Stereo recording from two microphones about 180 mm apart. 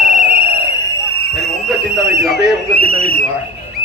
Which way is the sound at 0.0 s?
55° right (ahead or behind).